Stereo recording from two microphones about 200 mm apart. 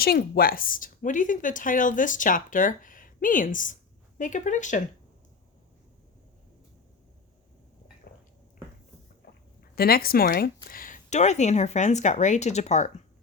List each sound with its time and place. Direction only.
0.0 s speech: 50° left (ahead or behind)
9.6 s speech: 50° left (ahead or behind)